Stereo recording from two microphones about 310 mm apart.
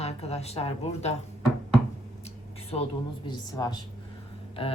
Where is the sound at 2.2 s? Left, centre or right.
Centre.